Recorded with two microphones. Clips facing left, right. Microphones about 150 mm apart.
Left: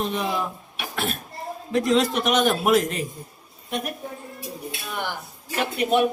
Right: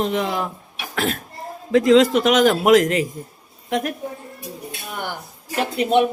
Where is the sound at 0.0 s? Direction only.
90° right.